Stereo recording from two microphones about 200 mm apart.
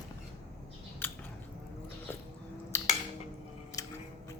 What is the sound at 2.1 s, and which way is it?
Squish, 10° left (ahead or behind).